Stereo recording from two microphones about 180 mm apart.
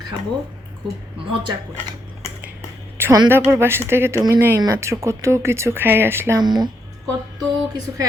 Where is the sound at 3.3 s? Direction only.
15° right (ahead or behind).